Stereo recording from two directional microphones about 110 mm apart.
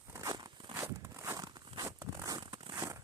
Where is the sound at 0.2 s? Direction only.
35° right (ahead or behind).